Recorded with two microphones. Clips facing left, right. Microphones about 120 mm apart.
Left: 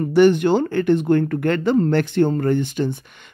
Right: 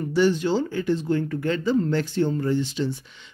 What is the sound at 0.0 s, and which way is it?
Speech, 60° left (ahead or behind).